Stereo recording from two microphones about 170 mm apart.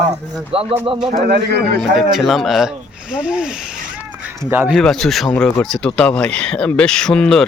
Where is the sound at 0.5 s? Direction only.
30° right (ahead or behind).